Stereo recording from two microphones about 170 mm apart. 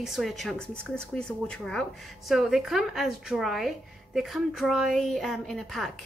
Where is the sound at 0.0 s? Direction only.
Centre (ahead or behind).